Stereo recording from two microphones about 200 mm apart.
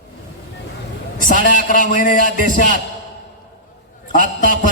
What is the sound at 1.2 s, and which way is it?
A man's voice, 40° left (ahead or behind).